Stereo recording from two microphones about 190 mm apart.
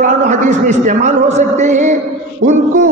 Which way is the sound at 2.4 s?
45° right (ahead or behind).